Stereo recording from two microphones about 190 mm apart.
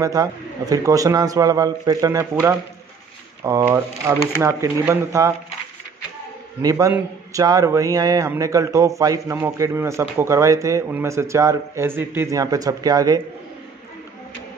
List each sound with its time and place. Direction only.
0.0 s a man's voice: 20° right (ahead or behind)
6.6 s a man's voice: 15° right (ahead or behind)